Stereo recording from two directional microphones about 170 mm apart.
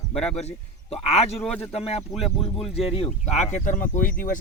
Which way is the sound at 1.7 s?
35° left (ahead or behind).